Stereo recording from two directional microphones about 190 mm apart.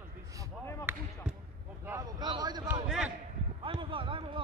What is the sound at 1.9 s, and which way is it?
Vehicle, 20° right (ahead or behind).